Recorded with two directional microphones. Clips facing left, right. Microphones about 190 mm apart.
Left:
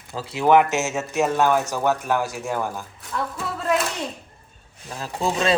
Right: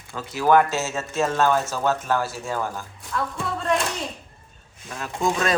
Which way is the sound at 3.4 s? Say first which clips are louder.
Left 1 dB; 5° left (ahead or behind).